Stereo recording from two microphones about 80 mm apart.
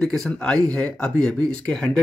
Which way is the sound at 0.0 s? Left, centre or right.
Centre.